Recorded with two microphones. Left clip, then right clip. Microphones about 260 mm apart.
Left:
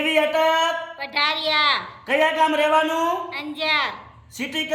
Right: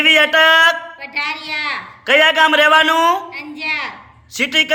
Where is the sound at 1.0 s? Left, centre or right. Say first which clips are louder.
Even; centre.